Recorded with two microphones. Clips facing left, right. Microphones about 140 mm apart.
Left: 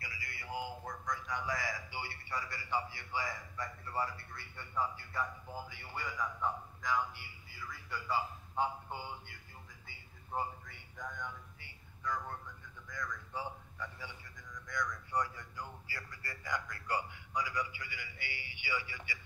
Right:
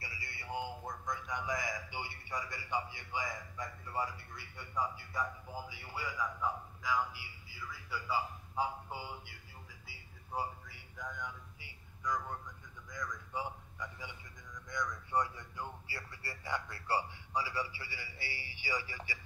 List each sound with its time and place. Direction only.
0.0 s a man's voice: 25° right (ahead or behind); by 9.3 s 5° right (ahead or behind)
9.8 s a sound: 10° right (ahead or behind)
12.8 s a man's voice: 15° right (ahead or behind); by 19.1 s 35° right (ahead or behind)